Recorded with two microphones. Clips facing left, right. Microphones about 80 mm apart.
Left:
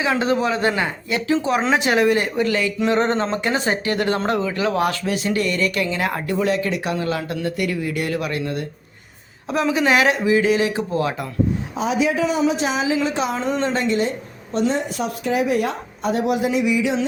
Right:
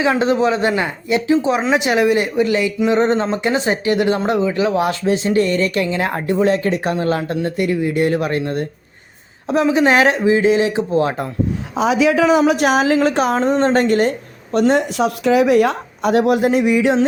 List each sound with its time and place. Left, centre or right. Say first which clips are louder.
0.0 s speech: right 4 dB; right
11.8 s a woman's voice: right 6 dB; right
16.2 s a sound: right 2 dB; right